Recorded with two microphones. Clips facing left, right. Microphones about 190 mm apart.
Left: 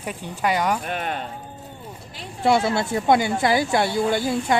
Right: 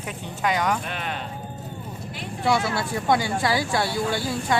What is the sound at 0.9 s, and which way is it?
Speech, 50° left (ahead or behind).